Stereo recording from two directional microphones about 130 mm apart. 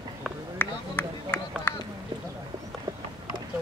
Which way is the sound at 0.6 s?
15° left (ahead or behind).